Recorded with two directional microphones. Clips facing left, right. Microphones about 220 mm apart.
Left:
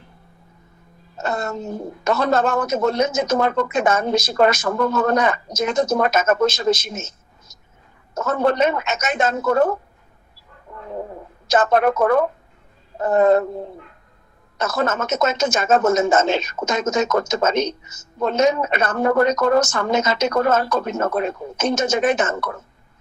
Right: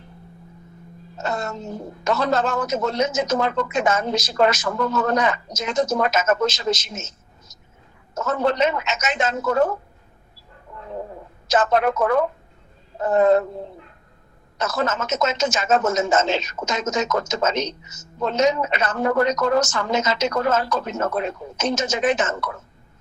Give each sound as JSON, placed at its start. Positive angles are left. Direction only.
{"t": 1.2, "sound": "a man's voice", "side_deg": 55}
{"t": 11.4, "sound": "a man's voice", "side_deg": 55}
{"t": 14.6, "sound": "a man's voice", "side_deg": 55}